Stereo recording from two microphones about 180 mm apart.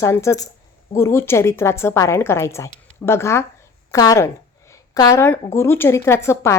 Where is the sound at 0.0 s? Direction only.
15° left (ahead or behind).